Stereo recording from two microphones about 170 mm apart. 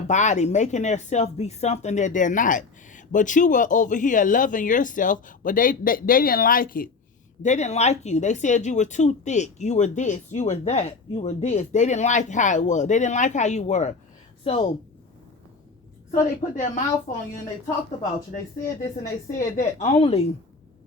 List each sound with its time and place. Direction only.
0.1 s speech: 45° left (ahead or behind)
7.4 s speech: 45° left (ahead or behind)
16.1 s speech: 50° left (ahead or behind)
19.3 s speech: 45° left (ahead or behind)